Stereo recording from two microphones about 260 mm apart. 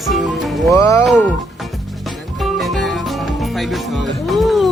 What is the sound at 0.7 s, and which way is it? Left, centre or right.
Speech, centre.